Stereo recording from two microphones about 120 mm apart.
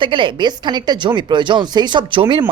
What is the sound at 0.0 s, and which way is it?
Speech, 45° right (ahead or behind).